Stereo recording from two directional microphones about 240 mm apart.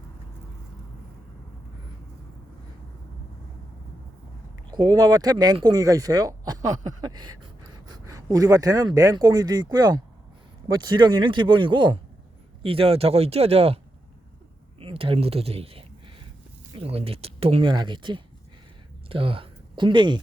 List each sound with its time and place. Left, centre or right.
4.7 s speech: centre
14.8 s speech: right